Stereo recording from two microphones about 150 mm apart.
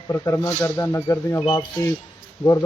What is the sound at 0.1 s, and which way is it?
Speech, 15° left (ahead or behind).